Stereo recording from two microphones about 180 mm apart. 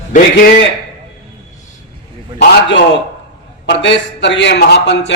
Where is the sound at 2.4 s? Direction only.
75° left (ahead or behind).